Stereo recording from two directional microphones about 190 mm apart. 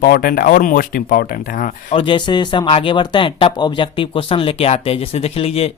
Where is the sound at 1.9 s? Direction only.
25° left (ahead or behind).